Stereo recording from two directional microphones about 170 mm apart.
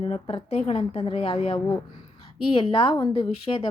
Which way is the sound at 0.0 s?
35° left (ahead or behind).